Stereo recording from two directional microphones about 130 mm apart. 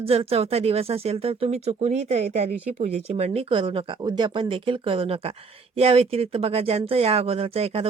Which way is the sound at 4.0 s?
35° right (ahead or behind).